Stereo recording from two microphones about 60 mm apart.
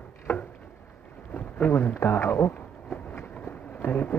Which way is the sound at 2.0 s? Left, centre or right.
Left.